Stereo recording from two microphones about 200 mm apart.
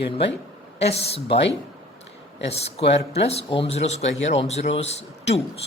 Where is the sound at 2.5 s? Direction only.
30° left (ahead or behind).